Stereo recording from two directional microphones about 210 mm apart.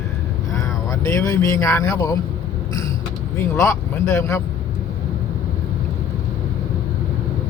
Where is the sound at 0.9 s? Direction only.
15° left (ahead or behind).